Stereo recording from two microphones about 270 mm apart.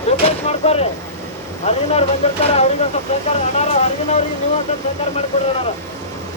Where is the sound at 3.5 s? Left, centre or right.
Left.